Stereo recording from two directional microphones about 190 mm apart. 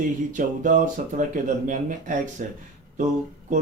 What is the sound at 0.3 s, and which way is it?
Speech, 45° right (ahead or behind).